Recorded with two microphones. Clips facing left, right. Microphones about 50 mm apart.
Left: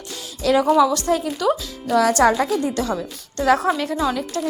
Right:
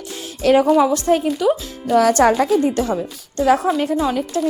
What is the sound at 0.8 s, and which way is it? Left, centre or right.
Speech, right.